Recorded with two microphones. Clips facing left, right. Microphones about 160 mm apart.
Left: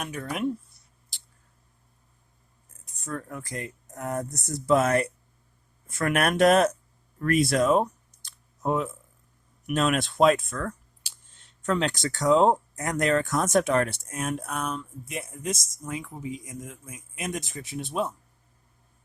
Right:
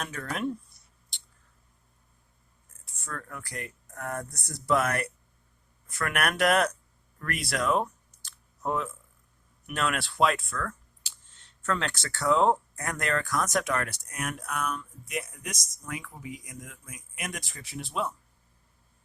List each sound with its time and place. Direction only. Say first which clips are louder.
0.3 s speech: left 3 dB; 5° left (ahead or behind)
1.1 s a sound: right 1 dB; centre (ahead or behind)
2.8 s speech: left 6 dB; 20° left (ahead or behind)